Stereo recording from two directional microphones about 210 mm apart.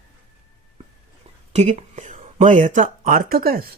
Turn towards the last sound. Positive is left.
turn(degrees=-45)  # may be behind; listen again after turning